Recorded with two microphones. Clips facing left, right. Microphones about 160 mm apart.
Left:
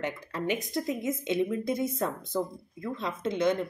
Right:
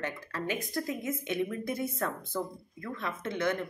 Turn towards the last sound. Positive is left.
turn(degrees=15)  # may be behind; listen again after turning